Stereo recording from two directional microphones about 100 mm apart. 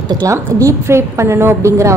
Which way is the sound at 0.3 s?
30° right (ahead or behind).